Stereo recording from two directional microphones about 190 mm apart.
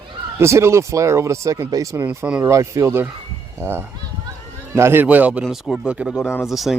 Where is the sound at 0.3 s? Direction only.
15° right (ahead or behind).